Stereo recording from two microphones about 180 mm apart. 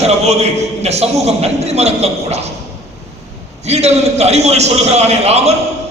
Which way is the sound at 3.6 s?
35° right (ahead or behind).